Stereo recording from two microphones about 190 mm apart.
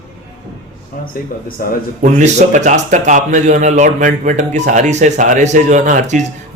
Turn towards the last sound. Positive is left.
turn(degrees=-40)  # may be behind; listen again after turning